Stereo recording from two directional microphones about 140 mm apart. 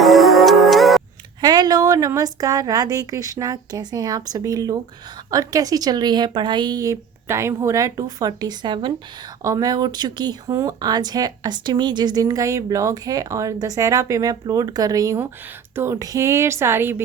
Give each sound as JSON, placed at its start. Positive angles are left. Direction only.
{"t": 0.0, "sound": "music", "side_deg": 0}
{"t": 1.4, "sound": "speech", "side_deg": -30}